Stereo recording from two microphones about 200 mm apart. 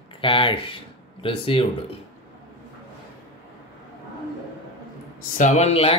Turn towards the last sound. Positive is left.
turn(degrees=30)  # may be behind; listen again after turning